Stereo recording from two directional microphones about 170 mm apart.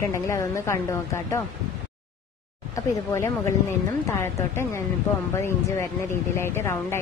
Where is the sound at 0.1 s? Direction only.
15° left (ahead or behind).